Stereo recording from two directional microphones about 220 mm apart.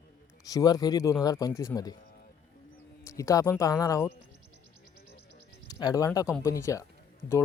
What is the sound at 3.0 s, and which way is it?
Speech, 15° left (ahead or behind).